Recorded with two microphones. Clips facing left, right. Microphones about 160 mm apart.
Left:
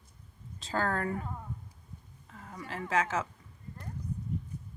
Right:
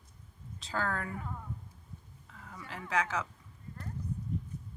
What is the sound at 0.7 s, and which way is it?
Speech, 30° left (ahead or behind).